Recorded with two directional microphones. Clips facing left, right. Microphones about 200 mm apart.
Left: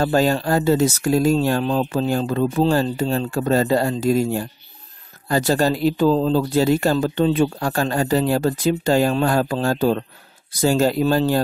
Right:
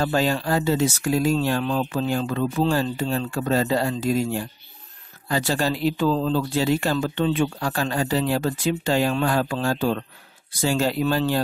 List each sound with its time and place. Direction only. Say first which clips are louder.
0.0 s speech: left 4 dB; 45° left (ahead or behind)